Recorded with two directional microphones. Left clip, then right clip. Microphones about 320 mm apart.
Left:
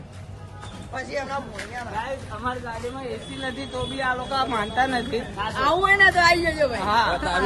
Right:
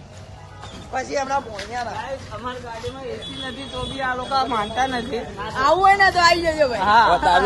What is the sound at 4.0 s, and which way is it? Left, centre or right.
Speech, centre.